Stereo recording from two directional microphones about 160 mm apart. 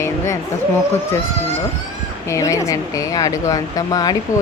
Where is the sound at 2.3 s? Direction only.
20° left (ahead or behind).